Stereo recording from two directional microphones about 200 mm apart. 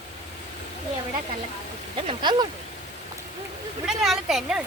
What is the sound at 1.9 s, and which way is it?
Speech, 25° right (ahead or behind).